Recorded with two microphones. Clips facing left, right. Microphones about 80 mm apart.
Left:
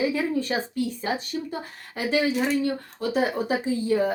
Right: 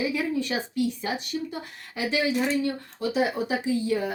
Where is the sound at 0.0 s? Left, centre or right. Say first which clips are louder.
Left 2 dB; left.